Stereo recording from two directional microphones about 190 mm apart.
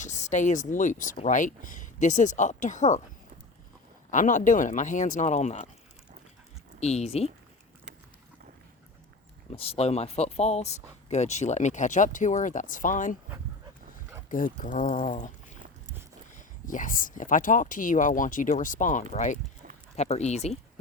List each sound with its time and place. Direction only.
0.0 s speech: 40° left (ahead or behind)
4.1 s speech: 40° left (ahead or behind)
6.7 s speech: 35° left (ahead or behind)
9.5 s speech: 30° left (ahead or behind)
14.3 s speech: 45° left (ahead or behind)
16.6 s speech: 45° left (ahead or behind)